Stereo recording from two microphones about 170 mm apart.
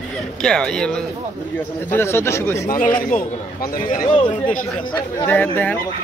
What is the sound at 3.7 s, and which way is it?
Speech, 55° left (ahead or behind).